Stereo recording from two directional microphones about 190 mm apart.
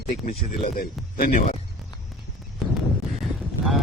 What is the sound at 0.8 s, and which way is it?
Speech, 50° left (ahead or behind).